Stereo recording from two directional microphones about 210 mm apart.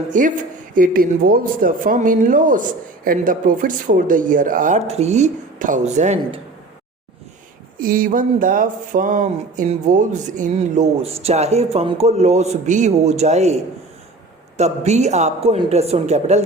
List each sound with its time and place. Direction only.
0.1 s speech: 40° right (ahead or behind)
7.8 s speech: 40° right (ahead or behind)
14.6 s speech: 30° right (ahead or behind)